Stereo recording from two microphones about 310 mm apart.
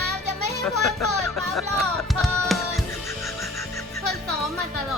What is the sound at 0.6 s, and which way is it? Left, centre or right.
Speech, centre.